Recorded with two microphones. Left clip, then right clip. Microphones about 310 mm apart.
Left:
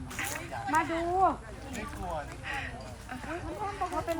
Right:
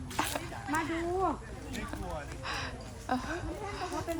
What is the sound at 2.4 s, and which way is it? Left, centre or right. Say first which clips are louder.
Speech: right 3 dB; centre.